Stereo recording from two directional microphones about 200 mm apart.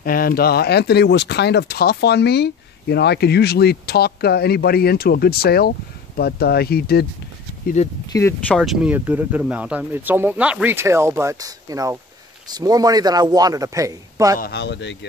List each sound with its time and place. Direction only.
0.0 s speech: 45° left (ahead or behind)
7.6 s speech: 35° left (ahead or behind)
8.1 s speech: 15° left (ahead or behind)
8.5 s a man's voice: 5° right (ahead or behind)
14.4 s speech: 55° left (ahead or behind)